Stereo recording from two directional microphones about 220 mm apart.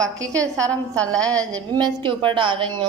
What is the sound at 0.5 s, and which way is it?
Speech, 5° left (ahead or behind).